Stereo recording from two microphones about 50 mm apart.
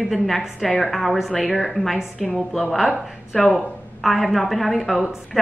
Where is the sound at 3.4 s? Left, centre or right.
Centre.